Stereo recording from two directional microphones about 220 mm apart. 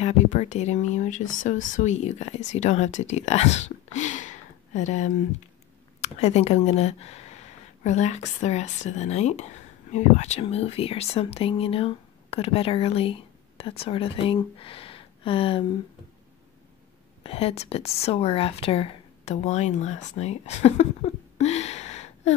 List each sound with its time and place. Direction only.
0.0 s speech: 30° left (ahead or behind)
17.2 s speech: 25° left (ahead or behind)